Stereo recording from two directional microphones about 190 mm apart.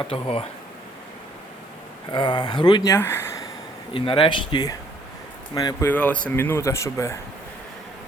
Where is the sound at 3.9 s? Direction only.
25° left (ahead or behind).